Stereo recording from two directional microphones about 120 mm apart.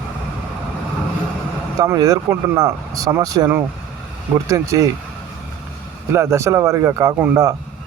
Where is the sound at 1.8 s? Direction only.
30° right (ahead or behind).